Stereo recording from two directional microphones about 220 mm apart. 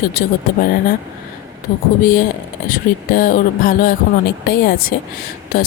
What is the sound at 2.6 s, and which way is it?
A woman's voice, 40° left (ahead or behind).